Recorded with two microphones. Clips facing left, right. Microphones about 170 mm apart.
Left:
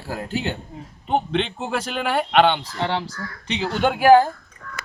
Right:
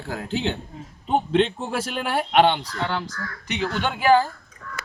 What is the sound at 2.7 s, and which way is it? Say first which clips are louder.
Speech: left 2 dB; 30° left (ahead or behind).